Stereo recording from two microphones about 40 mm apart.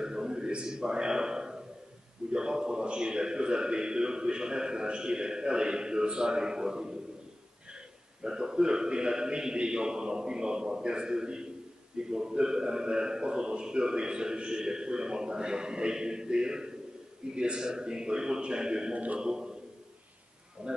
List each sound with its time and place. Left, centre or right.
0.0 s a sound: centre
2.3 s a man's voice: centre
8.2 s a man's voice: centre
20.6 s a man's voice: right